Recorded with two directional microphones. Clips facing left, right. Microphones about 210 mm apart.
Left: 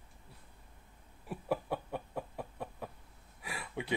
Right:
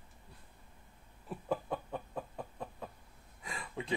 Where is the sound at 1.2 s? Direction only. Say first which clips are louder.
Left 1 dB; 5° left (ahead or behind).